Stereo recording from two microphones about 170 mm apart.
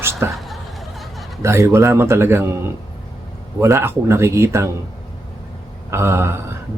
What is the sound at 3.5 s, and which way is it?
Speech, 15° right (ahead or behind).